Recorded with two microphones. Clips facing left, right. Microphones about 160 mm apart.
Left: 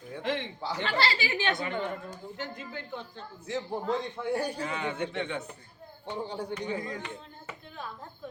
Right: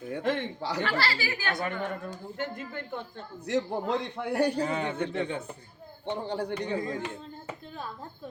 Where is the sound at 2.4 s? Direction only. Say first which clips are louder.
Right 5 dB; 55° right (ahead or behind); by 4.6 s 70° right (ahead or behind).